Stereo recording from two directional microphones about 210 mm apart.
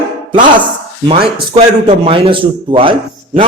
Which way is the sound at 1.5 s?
25° right (ahead or behind).